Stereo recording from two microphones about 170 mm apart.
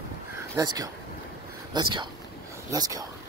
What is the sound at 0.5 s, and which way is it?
Speech, 20° right (ahead or behind).